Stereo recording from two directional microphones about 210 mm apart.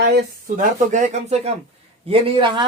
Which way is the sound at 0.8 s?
35° right (ahead or behind).